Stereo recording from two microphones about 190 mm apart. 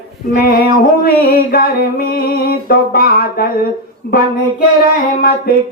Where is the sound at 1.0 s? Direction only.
55° left (ahead or behind).